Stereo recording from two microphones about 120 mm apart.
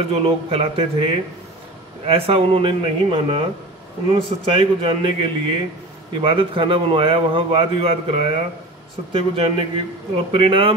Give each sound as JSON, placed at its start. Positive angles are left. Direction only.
{"t": 0.1, "sound": "a man's voice", "side_deg": -55}